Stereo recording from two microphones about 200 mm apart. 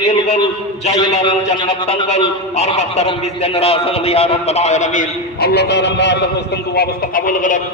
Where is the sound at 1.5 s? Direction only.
25° left (ahead or behind).